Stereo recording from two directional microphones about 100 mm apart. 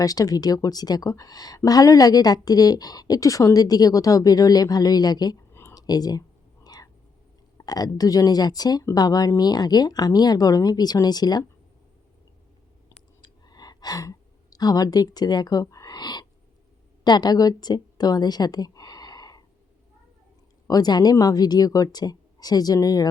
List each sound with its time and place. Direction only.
0.0 s speech: 35° left (ahead or behind)
6.7 s whispering: 40° left (ahead or behind)
7.6 s speech: 40° left (ahead or behind)
13.2 s a sound: 40° left (ahead or behind)
15.6 s a woman's voice: 35° left (ahead or behind)
20.7 s speech: 40° left (ahead or behind)